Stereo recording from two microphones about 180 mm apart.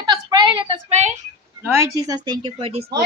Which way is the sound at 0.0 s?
25° right (ahead or behind).